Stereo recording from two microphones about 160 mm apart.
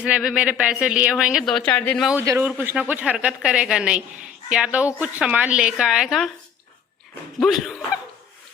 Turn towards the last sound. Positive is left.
turn(degrees=0)  # may be behind; listen again after turning